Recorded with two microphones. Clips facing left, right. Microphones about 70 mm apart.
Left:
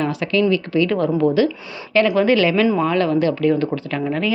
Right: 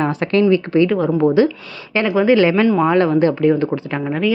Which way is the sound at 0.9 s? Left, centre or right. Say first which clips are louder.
Right 2 dB; centre.